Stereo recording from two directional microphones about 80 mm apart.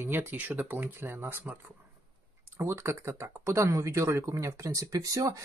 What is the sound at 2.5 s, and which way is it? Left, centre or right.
Speech, right.